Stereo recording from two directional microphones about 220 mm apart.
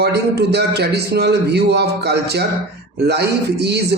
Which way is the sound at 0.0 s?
50° right (ahead or behind).